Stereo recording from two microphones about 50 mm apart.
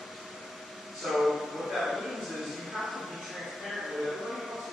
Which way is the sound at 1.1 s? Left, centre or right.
Centre.